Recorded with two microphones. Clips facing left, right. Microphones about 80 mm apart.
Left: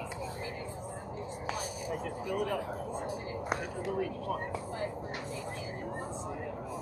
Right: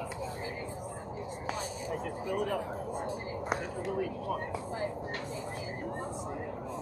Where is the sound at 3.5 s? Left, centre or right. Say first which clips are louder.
Right 1 dB; centre.